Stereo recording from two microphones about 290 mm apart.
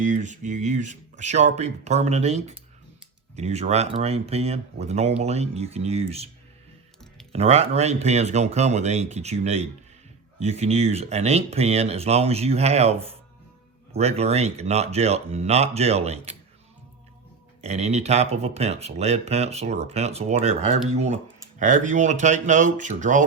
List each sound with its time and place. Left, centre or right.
0.0 s speech: right
7.3 s speech: right
17.6 s speech: right